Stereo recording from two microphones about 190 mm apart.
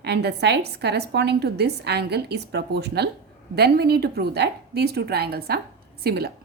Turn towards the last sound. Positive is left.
turn(degrees=-55)  # may be behind; listen again after turning